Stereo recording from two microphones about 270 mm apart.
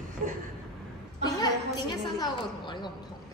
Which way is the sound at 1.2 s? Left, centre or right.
Centre.